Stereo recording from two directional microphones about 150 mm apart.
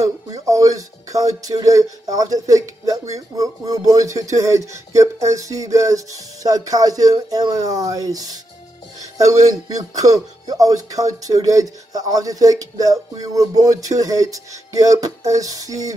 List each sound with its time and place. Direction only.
0.3 s speech: 25° right (ahead or behind)